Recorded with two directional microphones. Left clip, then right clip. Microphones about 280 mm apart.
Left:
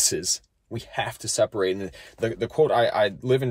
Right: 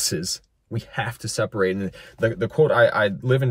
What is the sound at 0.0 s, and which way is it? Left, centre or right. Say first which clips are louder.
Speech: left 1 dB; centre.